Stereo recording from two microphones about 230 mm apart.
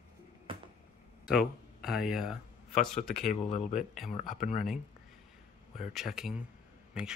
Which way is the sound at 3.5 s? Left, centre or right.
Left.